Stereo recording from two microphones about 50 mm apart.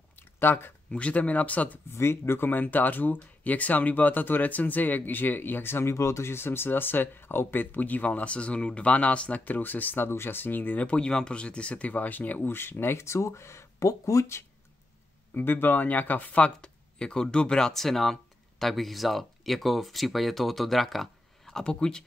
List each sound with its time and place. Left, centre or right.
0.1 s a sound: left
0.9 s speech: left
2.0 s speech: left
2.5 s speech: left
5.9 s speech: left
11.0 s speech: centre; by 12.4 s left
12.4 s speech: left
15.3 s speech: left; by 21.6 s centre
21.6 s speech: centre